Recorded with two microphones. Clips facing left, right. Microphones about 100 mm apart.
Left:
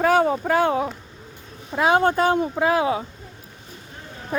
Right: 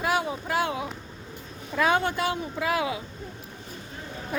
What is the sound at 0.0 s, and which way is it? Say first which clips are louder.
Speech: left 9 dB; 45° left (ahead or behind).